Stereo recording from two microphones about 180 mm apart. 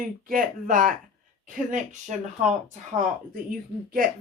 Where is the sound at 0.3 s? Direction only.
50° right (ahead or behind).